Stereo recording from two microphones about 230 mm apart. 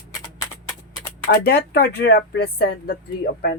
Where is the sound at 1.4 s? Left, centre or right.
Left.